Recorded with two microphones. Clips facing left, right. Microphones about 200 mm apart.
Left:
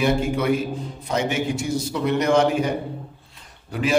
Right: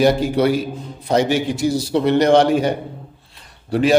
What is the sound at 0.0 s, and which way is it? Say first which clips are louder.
A man's voice: right 6 dB; 35° right (ahead or behind).